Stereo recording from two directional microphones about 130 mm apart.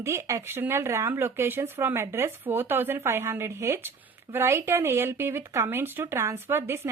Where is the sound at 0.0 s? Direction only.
20° right (ahead or behind).